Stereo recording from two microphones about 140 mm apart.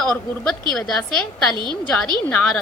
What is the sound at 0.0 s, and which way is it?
A woman's voice, 5° left (ahead or behind).